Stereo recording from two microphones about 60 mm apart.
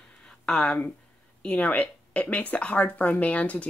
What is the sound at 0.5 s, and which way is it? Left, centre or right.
Speech, centre.